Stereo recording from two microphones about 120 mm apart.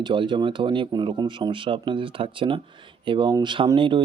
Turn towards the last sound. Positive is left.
turn(degrees=-40)  # may be behind; listen again after turning